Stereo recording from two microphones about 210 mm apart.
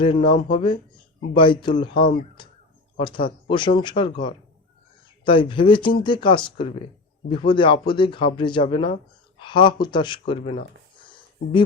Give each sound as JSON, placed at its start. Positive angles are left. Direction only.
{"t": 0.0, "sound": "speech", "side_deg": 25}